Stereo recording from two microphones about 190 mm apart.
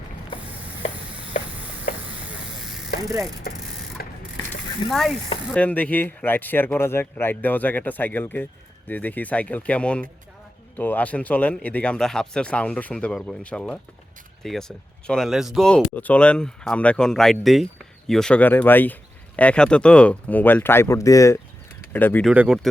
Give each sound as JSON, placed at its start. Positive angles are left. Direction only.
{"t": 3.5, "sound": "a sound", "side_deg": 55}
{"t": 4.9, "sound": "speech", "side_deg": 0}
{"t": 22.3, "sound": "speech", "side_deg": -5}